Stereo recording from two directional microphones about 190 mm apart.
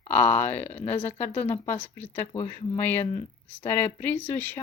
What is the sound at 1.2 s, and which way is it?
Speech, 10° left (ahead or behind).